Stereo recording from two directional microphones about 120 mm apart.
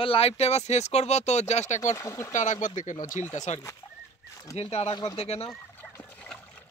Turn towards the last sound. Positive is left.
turn(degrees=55)  # may be behind; listen again after turning